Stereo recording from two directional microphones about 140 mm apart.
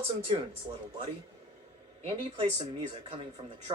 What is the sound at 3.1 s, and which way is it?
Speech, 45° right (ahead or behind).